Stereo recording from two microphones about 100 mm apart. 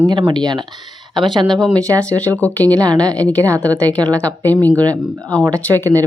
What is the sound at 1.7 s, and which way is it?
Speech, 35° right (ahead or behind).